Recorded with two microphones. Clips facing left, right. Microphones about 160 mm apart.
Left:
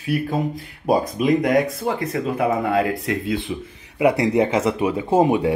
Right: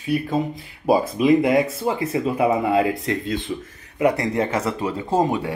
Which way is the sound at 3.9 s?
15° left (ahead or behind).